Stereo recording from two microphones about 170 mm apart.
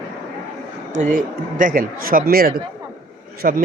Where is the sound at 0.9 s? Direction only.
50° right (ahead or behind).